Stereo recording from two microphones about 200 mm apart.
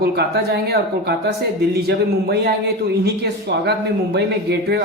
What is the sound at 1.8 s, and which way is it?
A man's voice, 55° right (ahead or behind).